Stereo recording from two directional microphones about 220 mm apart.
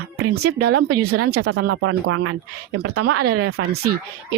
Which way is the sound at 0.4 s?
90° right.